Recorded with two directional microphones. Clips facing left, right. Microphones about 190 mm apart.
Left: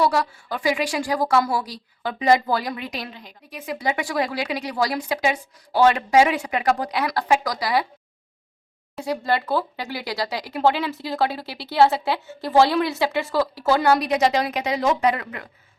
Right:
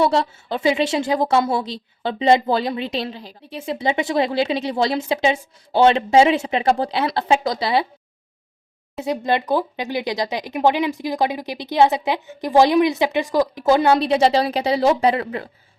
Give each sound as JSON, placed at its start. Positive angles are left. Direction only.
{"t": 0.0, "sound": "a woman's voice", "side_deg": -25}
{"t": 9.0, "sound": "a woman's voice", "side_deg": -20}